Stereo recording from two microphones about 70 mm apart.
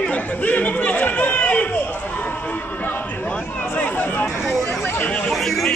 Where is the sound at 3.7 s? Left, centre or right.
Left.